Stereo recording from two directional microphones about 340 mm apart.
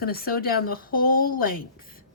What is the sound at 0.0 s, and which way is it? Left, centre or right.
Speech, left.